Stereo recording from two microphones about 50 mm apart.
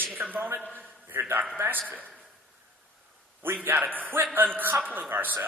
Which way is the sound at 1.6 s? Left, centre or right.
Right.